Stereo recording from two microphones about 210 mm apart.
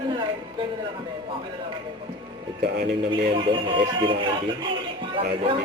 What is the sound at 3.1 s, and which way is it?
A man's voice, 25° right (ahead or behind).